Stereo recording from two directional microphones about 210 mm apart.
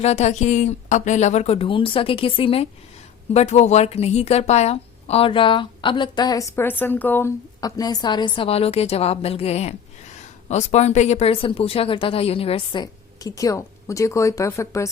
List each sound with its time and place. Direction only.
0.0 s a woman's voice: 30° left (ahead or behind); by 14.8 s 15° left (ahead or behind)